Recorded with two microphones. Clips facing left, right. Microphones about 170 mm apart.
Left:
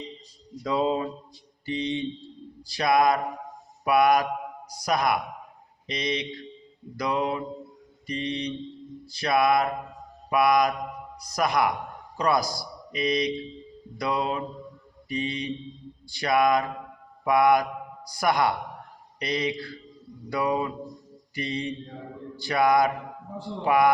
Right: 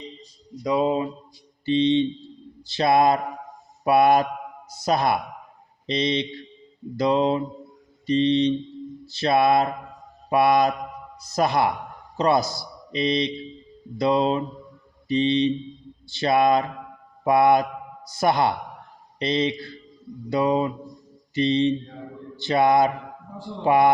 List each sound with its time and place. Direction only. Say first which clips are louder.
0.6 s music: right 3 dB; 15° right (ahead or behind)
1.6 s mantra: right 9 dB; 25° right (ahead or behind)
12.1 s speech: right 4 dB; 25° right (ahead or behind)
14.0 s mantra: right 7 dB; 25° right (ahead or behind)